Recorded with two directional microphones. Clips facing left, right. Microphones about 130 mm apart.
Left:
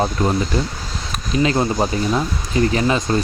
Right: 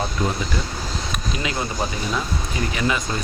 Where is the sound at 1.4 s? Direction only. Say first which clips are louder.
Left 7 dB; 35° left (ahead or behind).